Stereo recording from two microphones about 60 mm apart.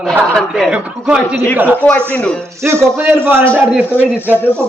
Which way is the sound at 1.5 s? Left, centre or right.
Right.